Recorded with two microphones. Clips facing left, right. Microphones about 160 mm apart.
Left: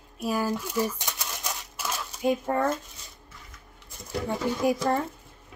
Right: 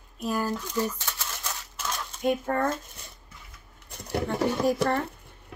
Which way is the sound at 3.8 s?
70° right (ahead or behind).